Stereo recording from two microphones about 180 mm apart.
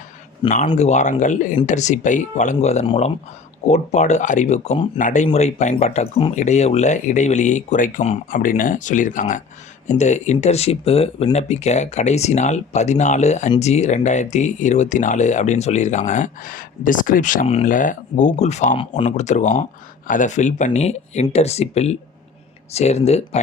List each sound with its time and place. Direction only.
0.4 s speech: 40° left (ahead or behind)
18.8 s speech: 30° left (ahead or behind)